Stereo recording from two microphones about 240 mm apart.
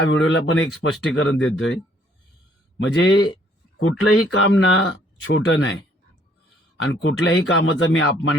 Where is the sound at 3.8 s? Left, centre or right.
Left.